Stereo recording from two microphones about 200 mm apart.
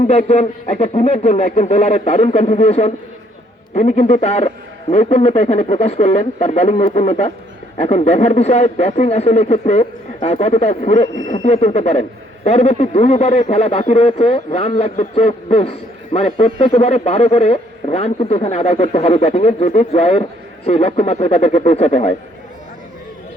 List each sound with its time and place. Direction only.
0.0 s speech: 35° left (ahead or behind)